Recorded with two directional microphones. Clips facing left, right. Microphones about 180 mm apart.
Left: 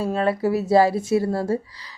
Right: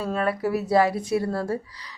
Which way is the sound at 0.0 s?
25° left (ahead or behind).